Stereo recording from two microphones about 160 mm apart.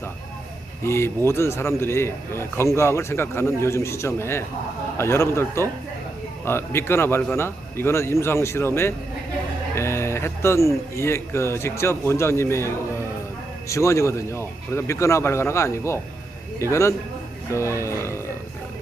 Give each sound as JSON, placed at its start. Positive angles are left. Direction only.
{"t": 0.8, "sound": "a man's voice", "side_deg": 15}